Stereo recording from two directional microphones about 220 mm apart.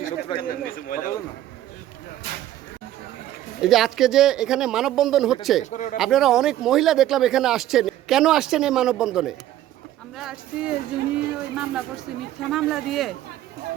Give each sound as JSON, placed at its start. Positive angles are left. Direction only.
{"t": 0.4, "sound": "speech", "side_deg": 40}
{"t": 3.6, "sound": "speech", "side_deg": 0}
{"t": 5.7, "sound": "speech", "side_deg": 35}
{"t": 6.0, "sound": "speech", "side_deg": 0}